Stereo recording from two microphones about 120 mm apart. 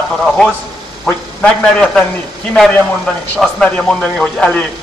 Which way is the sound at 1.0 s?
10° left (ahead or behind).